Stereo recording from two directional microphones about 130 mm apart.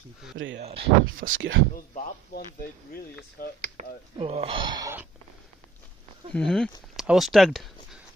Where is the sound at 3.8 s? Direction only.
55° right (ahead or behind).